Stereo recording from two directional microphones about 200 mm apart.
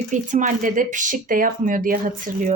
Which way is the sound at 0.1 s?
40° right (ahead or behind).